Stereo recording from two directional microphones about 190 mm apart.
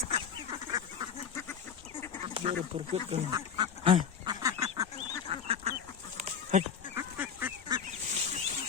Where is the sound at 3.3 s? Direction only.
25° right (ahead or behind).